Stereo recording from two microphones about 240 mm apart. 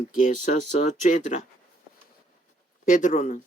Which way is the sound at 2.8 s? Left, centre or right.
Left.